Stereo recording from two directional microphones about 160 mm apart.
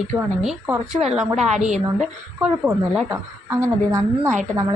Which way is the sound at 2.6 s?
10° right (ahead or behind).